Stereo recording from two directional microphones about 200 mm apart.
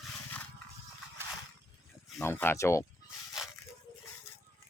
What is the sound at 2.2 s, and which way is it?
Speech, 10° left (ahead or behind).